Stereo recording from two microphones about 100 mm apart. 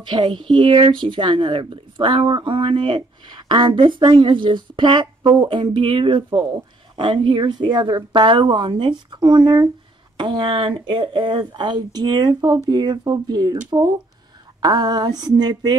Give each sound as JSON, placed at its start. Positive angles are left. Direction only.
{"t": 0.0, "sound": "speech", "side_deg": -55}